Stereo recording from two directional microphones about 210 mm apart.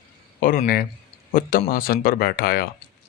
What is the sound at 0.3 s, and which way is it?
Speech, 40° left (ahead or behind).